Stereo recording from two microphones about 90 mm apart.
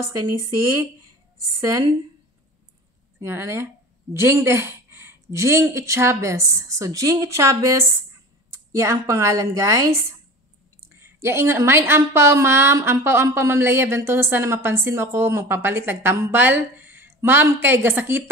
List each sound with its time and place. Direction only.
0.0 s speech: 35° right (ahead or behind)
1.5 s speech: 40° right (ahead or behind)
3.2 s a woman's voice: 30° right (ahead or behind)